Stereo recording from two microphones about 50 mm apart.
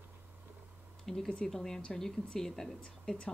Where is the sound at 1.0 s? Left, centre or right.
Centre.